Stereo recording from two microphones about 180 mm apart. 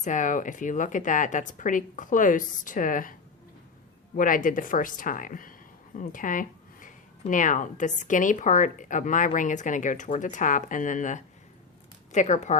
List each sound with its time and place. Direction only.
0.0 s speech: 45° left (ahead or behind)